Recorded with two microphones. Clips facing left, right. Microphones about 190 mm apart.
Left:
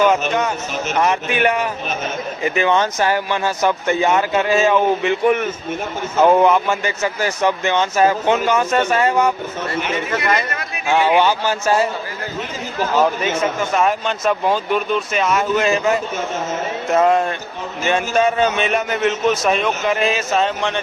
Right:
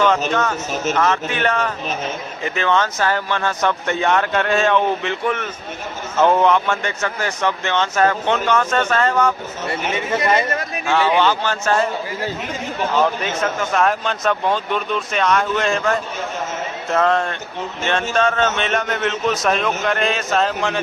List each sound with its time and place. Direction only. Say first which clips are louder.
0.9 s speech: left 4 dB; 15° left (ahead or behind)
10.1 s speech: right 4 dB; 30° right (ahead or behind)
10.8 s speech: left 2 dB; 15° left (ahead or behind)
13.0 s speech: left 3 dB; 5° left (ahead or behind)